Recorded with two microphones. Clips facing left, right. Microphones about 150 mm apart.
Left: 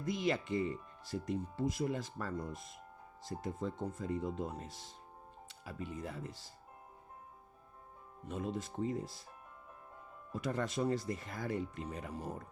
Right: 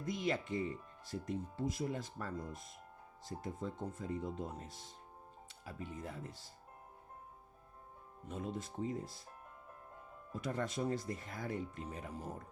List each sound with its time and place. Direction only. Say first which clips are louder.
0.0 s speech: left 2 dB; 90° left
8.3 s speech: left 3 dB; 75° left (ahead or behind)
10.3 s speech: left 3 dB; 80° left